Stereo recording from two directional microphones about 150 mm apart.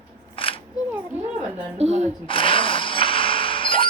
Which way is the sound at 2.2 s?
35° left (ahead or behind).